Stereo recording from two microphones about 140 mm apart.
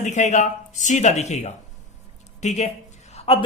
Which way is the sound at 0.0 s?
60° left (ahead or behind).